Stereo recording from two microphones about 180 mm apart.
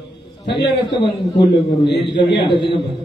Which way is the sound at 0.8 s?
25° left (ahead or behind).